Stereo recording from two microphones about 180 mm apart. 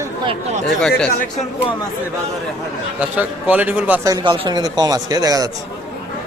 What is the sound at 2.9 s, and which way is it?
Speech, 10° right (ahead or behind).